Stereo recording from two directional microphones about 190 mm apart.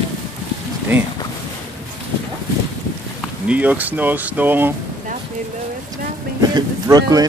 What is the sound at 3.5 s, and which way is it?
Speech, 10° right (ahead or behind).